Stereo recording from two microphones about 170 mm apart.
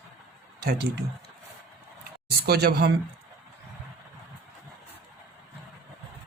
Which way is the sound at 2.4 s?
70° right (ahead or behind).